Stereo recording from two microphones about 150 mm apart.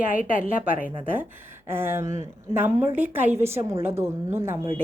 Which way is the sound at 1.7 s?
15° right (ahead or behind).